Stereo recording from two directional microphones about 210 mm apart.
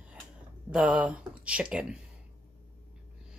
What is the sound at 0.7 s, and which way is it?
Speech, 5° right (ahead or behind).